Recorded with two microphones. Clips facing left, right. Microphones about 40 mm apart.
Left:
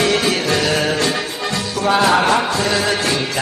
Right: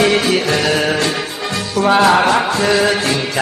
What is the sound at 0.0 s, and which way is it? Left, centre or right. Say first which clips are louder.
Music: right 3 dB; centre.